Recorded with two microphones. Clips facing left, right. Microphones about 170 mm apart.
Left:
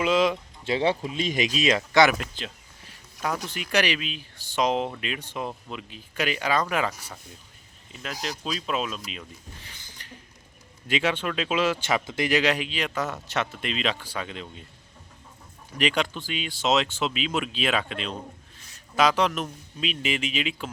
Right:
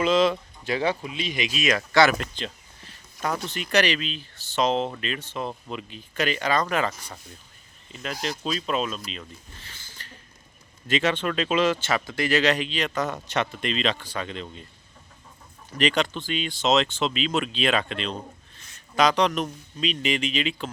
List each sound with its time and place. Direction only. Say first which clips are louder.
0.0 s speech: right 2 dB; 10° left (ahead or behind)
0.6 s speech: left 1 dB; 25° left (ahead or behind)
1.0 s speech: left 3 dB; 45° left (ahead or behind)
1.5 s speech: even; 25° left (ahead or behind)
2.1 s speech: right 3 dB; 5° left (ahead or behind)
5.6 s speech: right 3 dB; centre (ahead or behind)
15.7 s speech: right 2 dB; 10° left (ahead or behind)